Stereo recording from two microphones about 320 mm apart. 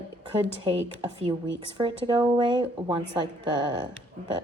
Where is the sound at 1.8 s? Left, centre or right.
Centre.